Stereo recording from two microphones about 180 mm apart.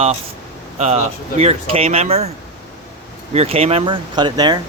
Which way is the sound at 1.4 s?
35° right (ahead or behind).